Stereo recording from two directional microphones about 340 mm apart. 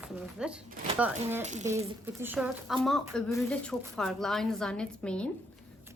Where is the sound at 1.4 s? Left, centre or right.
Right.